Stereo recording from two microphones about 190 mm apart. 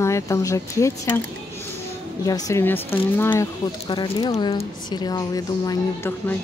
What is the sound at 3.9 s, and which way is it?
Speech, 20° left (ahead or behind).